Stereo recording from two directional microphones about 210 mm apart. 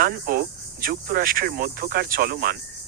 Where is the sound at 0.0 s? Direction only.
45° right (ahead or behind).